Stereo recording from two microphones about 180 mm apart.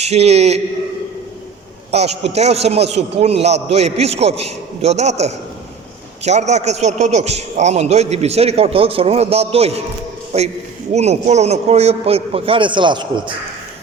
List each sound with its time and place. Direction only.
0.0 s a man's voice: 35° right (ahead or behind)
1.9 s a man's voice: 35° right (ahead or behind)